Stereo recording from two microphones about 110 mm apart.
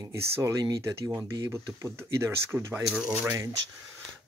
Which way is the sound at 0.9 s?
25° right (ahead or behind).